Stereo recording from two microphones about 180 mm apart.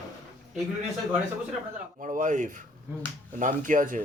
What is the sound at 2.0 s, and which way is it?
A man's voice, 45° right (ahead or behind).